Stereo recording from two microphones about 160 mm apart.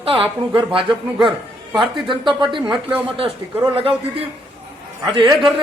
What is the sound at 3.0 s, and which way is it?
A man's voice, 35° right (ahead or behind).